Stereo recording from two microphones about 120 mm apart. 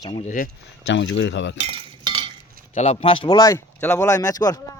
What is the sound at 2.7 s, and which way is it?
Speech, 60° left (ahead or behind).